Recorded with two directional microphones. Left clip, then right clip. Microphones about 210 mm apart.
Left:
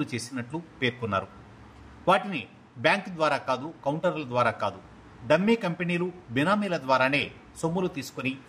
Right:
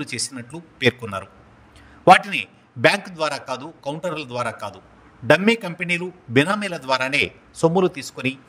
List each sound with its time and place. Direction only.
0.0 s a man's voice: 50° right (ahead or behind)
2.0 s a man's voice: 50° right (ahead or behind)
4.4 s a man's voice: centre (ahead or behind)
5.3 s a man's voice: 50° right (ahead or behind)